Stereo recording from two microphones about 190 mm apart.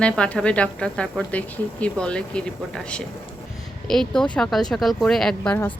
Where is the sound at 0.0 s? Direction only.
5° left (ahead or behind).